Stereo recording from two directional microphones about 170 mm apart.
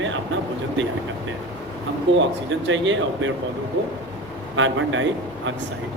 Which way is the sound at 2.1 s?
90° right.